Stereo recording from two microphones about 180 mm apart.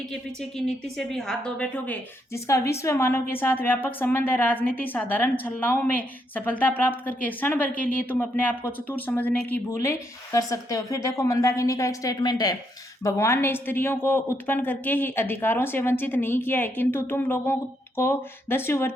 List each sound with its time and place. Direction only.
0.1 s speech: 5° left (ahead or behind)